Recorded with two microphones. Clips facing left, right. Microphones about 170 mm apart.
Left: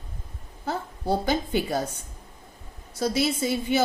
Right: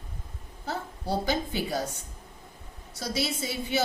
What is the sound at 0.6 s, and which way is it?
A woman's voice, 55° left (ahead or behind).